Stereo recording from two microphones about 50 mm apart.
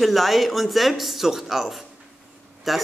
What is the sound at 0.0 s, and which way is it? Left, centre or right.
Speech, centre.